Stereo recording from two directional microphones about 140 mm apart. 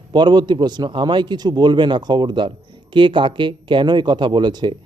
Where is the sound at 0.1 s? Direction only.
30° right (ahead or behind).